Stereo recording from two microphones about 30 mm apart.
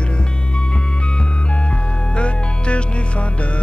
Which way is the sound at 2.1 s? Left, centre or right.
Left.